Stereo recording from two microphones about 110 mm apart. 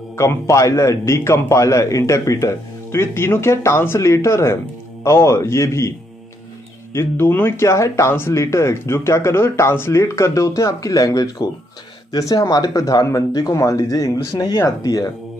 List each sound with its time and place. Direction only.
0.1 s speech: 25° left (ahead or behind)